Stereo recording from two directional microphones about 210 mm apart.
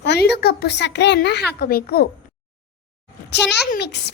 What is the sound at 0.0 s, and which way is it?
Speech, 50° left (ahead or behind).